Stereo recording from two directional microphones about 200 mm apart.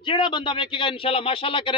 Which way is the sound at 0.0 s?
25° left (ahead or behind).